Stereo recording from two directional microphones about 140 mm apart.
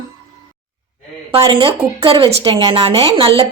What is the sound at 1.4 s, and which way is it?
A woman's voice, 35° right (ahead or behind).